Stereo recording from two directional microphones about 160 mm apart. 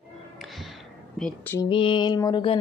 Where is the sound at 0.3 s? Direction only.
Centre (ahead or behind).